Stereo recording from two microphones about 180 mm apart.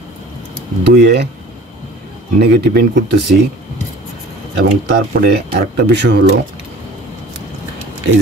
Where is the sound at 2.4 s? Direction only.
60° right (ahead or behind).